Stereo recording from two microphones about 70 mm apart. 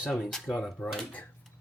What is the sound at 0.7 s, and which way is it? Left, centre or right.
Speech, left.